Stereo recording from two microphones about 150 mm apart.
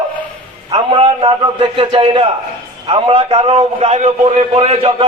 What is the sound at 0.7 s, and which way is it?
A man's voice, 40° right (ahead or behind).